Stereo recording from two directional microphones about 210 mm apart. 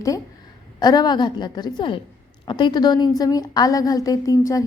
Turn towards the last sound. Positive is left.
turn(degrees=15)  # may be behind; listen again after turning